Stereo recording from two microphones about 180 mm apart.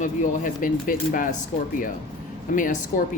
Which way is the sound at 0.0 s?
50° left (ahead or behind).